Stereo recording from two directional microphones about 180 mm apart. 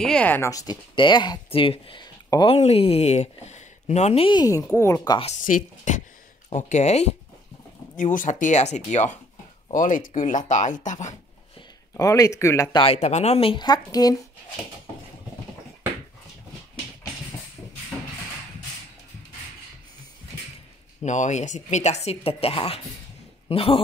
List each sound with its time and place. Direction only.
0.0 s speech: 5° left (ahead or behind)
5.2 s speech: 45° left (ahead or behind)
12.0 s speech: 20° left (ahead or behind)
12.8 s speech: 35° left (ahead or behind); by 14.2 s 20° left (ahead or behind)
21.0 s speech: 40° left (ahead or behind)